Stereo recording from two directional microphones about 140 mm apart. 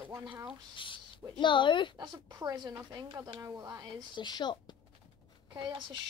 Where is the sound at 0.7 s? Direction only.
35° left (ahead or behind).